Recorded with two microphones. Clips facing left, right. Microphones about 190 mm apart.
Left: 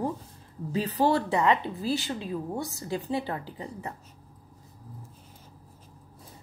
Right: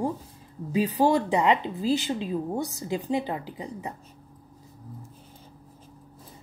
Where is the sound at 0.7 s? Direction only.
15° right (ahead or behind).